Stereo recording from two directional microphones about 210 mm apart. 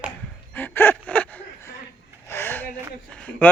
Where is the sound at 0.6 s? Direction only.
10° left (ahead or behind).